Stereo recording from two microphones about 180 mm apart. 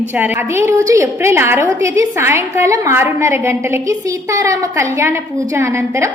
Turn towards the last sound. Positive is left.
turn(degrees=-15)  # may be behind; listen again after turning